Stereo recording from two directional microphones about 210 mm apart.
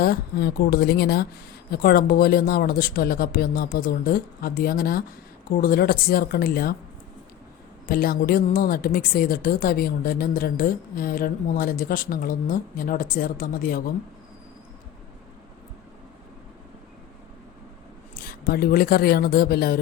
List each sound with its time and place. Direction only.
0.0 s speech: 50° left (ahead or behind)
7.9 s speech: 45° left (ahead or behind)
18.2 s speech: 45° left (ahead or behind)